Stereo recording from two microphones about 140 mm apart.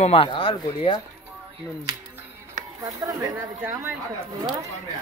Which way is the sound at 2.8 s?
25° right (ahead or behind).